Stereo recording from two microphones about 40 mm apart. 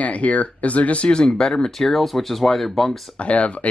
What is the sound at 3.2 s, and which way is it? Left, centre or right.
Speech, left.